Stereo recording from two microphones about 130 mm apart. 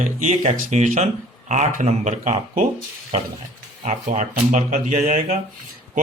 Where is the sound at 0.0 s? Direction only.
75° right (ahead or behind).